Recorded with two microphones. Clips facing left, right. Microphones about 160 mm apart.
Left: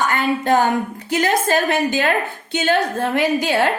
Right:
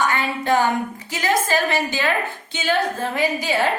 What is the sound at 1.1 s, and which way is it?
A woman's voice, 55° left (ahead or behind).